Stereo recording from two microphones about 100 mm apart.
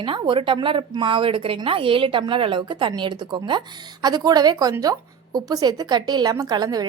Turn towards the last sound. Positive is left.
turn(degrees=-40)  # may be behind; listen again after turning